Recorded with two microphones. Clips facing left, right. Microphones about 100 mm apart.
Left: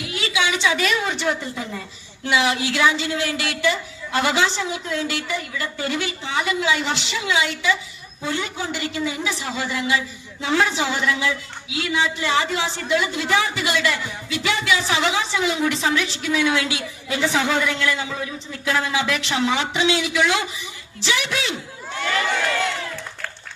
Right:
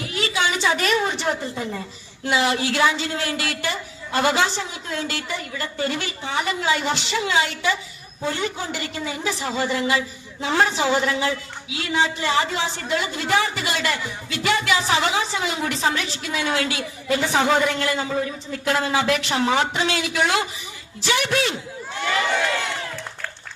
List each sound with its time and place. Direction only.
0.0 s a woman's voice: 35° right (ahead or behind)